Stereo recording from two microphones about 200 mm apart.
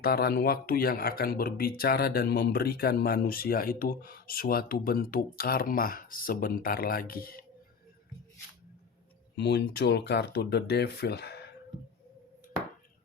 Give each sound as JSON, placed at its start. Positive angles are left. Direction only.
{"t": 0.0, "sound": "speech", "side_deg": 50}
{"t": 9.3, "sound": "speech", "side_deg": 60}